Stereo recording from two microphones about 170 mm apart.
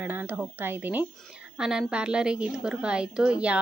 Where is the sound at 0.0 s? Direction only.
10° right (ahead or behind).